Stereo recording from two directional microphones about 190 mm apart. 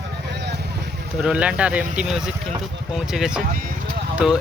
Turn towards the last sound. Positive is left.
turn(degrees=-5)  # may be behind; listen again after turning